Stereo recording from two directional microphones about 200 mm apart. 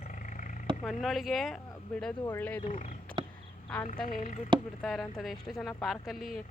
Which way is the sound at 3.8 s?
25° left (ahead or behind).